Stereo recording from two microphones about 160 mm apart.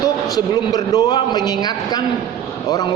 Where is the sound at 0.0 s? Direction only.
25° left (ahead or behind).